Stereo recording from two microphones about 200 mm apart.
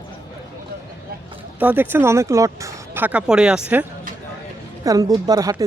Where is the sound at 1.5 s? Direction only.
10° right (ahead or behind).